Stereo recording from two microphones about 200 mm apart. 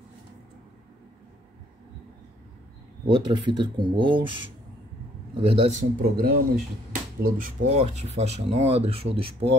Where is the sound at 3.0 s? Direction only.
25° right (ahead or behind).